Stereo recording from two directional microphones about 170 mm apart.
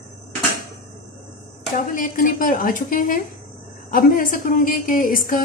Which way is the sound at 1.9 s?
55° left (ahead or behind).